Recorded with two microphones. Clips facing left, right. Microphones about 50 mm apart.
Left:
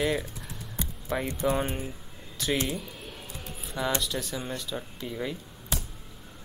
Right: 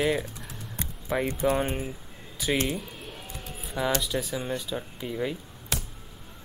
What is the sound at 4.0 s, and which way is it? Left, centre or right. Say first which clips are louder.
Speech: right 3 dB; centre.